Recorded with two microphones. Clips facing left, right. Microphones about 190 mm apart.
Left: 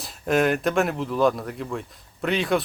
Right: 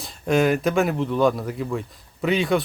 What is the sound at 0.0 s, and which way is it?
Speech, centre (ahead or behind).